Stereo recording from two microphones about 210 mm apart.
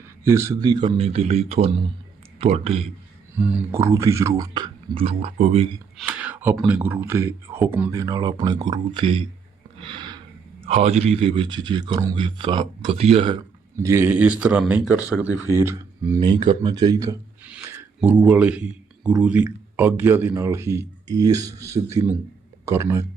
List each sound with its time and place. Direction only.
0.3 s speech: 15° right (ahead or behind); by 2.8 s 30° right (ahead or behind)
3.3 s a man's voice: 10° right (ahead or behind); by 5.6 s 30° right (ahead or behind)
6.0 s a man's voice: 5° right (ahead or behind); by 9.2 s 25° right (ahead or behind)
9.8 s snort: 25° right (ahead or behind)
10.7 s speech: 30° right (ahead or behind)
13.8 s a man's voice: 10° right (ahead or behind)
17.5 s a sound: 10° right (ahead or behind)
19.2 s a man's voice: 5° right (ahead or behind)